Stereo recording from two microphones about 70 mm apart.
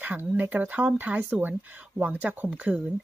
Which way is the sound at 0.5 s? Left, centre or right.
Right.